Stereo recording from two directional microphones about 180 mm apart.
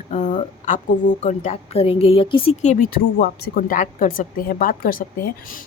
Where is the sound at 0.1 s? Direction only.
40° left (ahead or behind).